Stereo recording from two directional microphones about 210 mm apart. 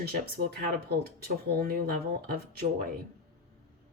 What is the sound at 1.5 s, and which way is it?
A woman's voice, 45° right (ahead or behind).